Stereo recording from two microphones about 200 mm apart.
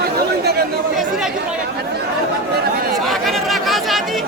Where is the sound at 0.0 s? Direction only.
55° right (ahead or behind).